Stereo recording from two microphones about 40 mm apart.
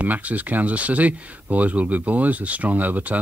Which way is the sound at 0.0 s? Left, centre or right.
Right.